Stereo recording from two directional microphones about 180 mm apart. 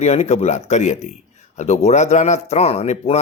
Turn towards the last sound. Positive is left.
turn(degrees=35)  # may be behind; listen again after turning